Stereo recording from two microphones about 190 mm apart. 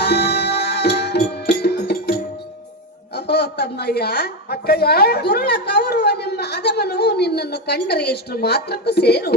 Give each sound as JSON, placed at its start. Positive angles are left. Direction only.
{"t": 0.0, "sound": "music", "side_deg": 60}
{"t": 3.2, "sound": "a woman's voice", "side_deg": 60}